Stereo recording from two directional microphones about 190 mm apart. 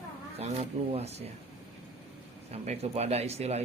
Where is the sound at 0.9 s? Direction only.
35° right (ahead or behind).